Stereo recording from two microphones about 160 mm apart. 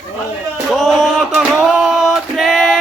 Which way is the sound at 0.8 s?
Centre (ahead or behind).